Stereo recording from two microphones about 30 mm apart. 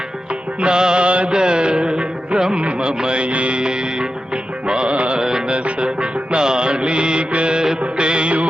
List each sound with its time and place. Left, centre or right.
0.6 s music: right
1.0 s music: right
1.3 s music: right
4.7 s music: right
5.1 s music: right
5.5 s music: right